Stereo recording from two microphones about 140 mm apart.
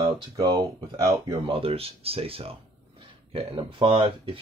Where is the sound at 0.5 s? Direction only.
25° right (ahead or behind).